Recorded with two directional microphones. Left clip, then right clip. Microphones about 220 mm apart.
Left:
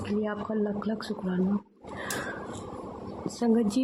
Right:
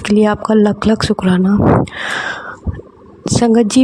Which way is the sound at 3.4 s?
40° right (ahead or behind).